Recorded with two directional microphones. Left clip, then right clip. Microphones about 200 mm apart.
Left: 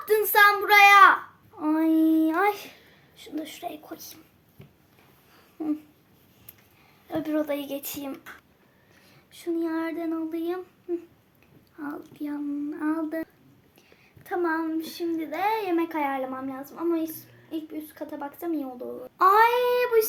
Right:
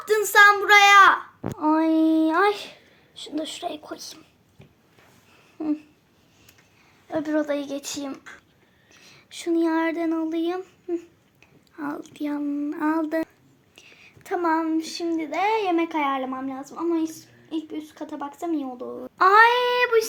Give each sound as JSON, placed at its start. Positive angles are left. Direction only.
{"t": 0.0, "sound": "a sound", "side_deg": -25}
{"t": 1.5, "sound": "child singing", "side_deg": -25}
{"t": 3.2, "sound": "speech", "side_deg": -25}
{"t": 5.5, "sound": "a sound", "side_deg": -20}
{"t": 7.1, "sound": "speech", "side_deg": -15}
{"t": 9.0, "sound": "a child's voice", "side_deg": -50}